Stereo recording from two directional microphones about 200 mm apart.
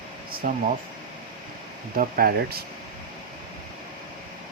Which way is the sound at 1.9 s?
45° right (ahead or behind).